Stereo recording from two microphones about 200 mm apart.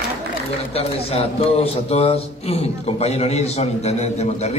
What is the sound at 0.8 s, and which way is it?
A man's voice, 30° left (ahead or behind).